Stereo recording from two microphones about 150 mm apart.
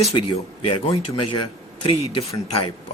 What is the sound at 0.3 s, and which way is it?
Speech, 40° left (ahead or behind).